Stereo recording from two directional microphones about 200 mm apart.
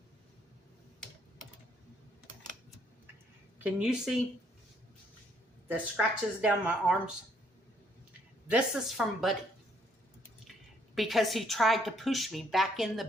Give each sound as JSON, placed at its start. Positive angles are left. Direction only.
{"t": 3.6, "sound": "speech", "side_deg": -5}
{"t": 5.6, "sound": "speech", "side_deg": -5}
{"t": 8.4, "sound": "speech", "side_deg": -5}
{"t": 10.9, "sound": "speech", "side_deg": 0}